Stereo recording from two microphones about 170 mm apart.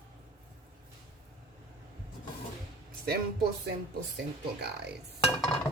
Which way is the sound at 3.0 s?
65° right (ahead or behind).